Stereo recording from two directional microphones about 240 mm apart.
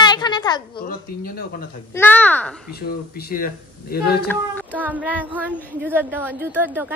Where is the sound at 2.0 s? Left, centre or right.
Centre.